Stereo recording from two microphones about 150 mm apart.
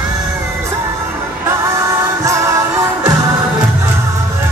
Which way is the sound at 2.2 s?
20° right (ahead or behind).